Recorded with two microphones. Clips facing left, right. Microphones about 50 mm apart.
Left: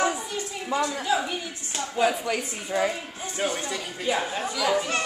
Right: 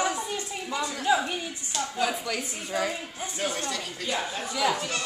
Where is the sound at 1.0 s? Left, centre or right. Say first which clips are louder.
Right 1 dB; centre.